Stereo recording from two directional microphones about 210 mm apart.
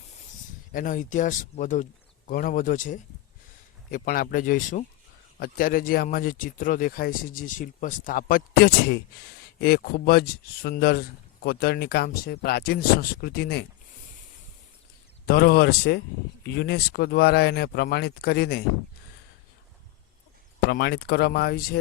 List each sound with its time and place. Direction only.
0.7 s speech: 40° left (ahead or behind)
15.3 s speech: 45° left (ahead or behind)
20.7 s speech: 50° left (ahead or behind)